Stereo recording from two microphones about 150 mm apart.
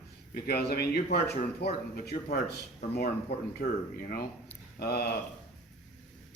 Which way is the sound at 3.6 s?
50° left (ahead or behind).